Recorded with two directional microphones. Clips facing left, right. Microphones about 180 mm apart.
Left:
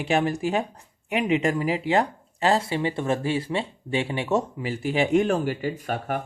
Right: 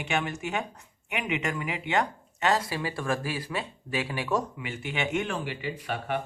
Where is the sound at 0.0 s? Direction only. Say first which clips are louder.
Left 7 dB; 35° left (ahead or behind).